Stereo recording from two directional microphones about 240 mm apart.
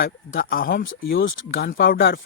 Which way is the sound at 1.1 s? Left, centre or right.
Left.